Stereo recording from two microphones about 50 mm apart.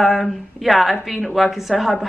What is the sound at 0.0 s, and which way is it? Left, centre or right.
A woman's voice, centre.